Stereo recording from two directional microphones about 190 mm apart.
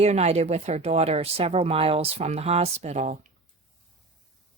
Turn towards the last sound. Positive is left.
turn(degrees=-35)  # may be behind; listen again after turning